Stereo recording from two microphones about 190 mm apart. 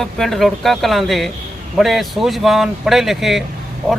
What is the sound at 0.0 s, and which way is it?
Speech, centre (ahead or behind).